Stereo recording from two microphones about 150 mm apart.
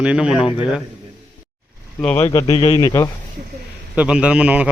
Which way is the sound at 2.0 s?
10° left (ahead or behind).